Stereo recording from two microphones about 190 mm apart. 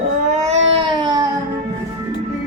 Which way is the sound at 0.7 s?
25° right (ahead or behind).